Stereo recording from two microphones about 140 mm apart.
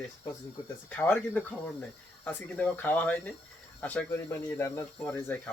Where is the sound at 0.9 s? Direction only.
10° left (ahead or behind).